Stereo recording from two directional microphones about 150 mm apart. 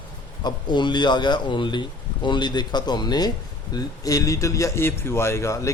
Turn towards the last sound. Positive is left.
turn(degrees=20)  # may be behind; listen again after turning